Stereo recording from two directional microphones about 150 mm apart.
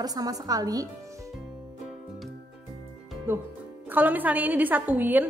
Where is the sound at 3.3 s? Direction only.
15° right (ahead or behind).